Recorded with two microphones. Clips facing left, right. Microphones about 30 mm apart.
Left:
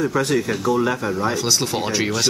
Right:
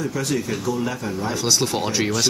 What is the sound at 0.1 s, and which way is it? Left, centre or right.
Speech, left.